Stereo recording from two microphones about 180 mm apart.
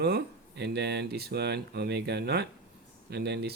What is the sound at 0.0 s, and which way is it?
Speech, 65° right (ahead or behind).